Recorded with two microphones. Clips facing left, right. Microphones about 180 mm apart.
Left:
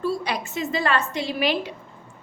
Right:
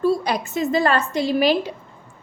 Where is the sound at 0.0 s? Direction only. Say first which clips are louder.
Right 6 dB; 45° right (ahead or behind).